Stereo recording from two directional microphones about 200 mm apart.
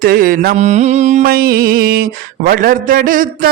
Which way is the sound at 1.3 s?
45° right (ahead or behind).